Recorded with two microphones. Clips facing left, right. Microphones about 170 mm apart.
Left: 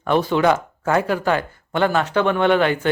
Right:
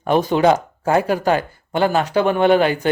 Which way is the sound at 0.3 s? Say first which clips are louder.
Right 3 dB; 15° right (ahead or behind).